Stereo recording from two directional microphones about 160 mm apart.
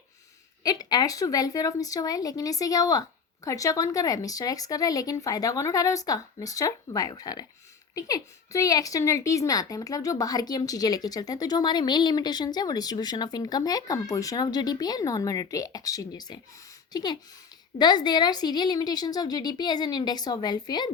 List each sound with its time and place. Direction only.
0.6 s a woman's voice: 25° left (ahead or behind)